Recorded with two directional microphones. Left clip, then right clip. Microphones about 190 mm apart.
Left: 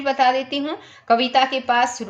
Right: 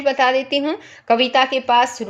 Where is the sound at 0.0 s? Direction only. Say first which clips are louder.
Right 2 dB; 35° right (ahead or behind).